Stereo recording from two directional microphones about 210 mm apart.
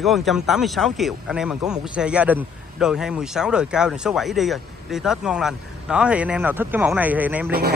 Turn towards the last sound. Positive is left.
turn(degrees=-10)  # may be behind; listen again after turning